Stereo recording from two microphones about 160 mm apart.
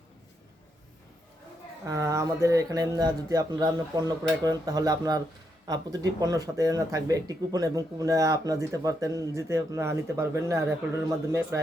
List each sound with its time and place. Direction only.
1.9 s speech: 20° right (ahead or behind)